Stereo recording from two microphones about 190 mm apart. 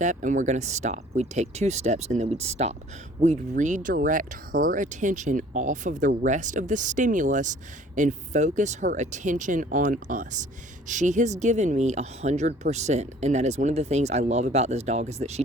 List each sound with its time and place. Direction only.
0.0 s speech: 40° right (ahead or behind)